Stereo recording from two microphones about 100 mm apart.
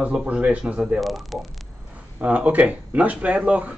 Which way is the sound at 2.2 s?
15° right (ahead or behind).